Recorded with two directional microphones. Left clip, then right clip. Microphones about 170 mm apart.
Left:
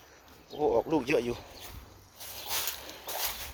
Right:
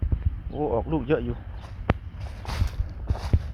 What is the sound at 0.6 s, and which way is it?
Speech, 40° left (ahead or behind).